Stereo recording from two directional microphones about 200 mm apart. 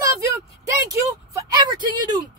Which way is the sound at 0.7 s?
15° right (ahead or behind).